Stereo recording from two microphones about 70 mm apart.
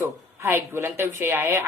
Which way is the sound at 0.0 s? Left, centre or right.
Right.